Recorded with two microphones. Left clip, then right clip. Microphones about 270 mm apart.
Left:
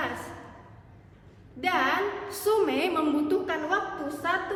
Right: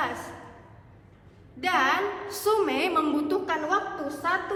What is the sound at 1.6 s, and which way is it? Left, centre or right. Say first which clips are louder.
A woman's voice: right 2 dB; centre.